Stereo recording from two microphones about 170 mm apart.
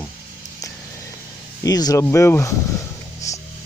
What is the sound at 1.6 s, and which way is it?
Speech, 20° left (ahead or behind).